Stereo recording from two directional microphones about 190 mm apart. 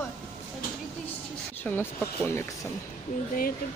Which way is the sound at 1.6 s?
10° left (ahead or behind).